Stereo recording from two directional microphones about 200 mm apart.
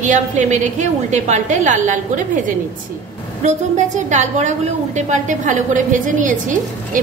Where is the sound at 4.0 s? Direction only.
35° right (ahead or behind).